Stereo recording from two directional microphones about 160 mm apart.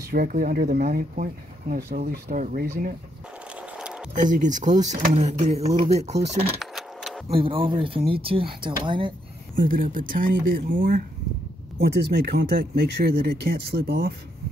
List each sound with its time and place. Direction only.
0.1 s speech: 60° right (ahead or behind)
2.0 s speech: 45° right (ahead or behind)
3.7 s a sound: 5° right (ahead or behind)
4.2 s speech: 50° right (ahead or behind)
6.6 s keys jangling: centre (ahead or behind)
7.2 s speech: 35° right (ahead or behind)
9.6 s speech: 60° right (ahead or behind)
11.8 s speech: 90° right